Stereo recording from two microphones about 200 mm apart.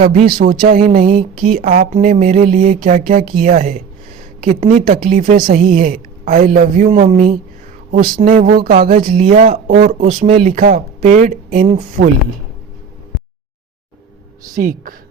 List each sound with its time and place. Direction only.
0.3 s a woman's voice: 45° right (ahead or behind)
14.4 s a woman's voice: 40° right (ahead or behind)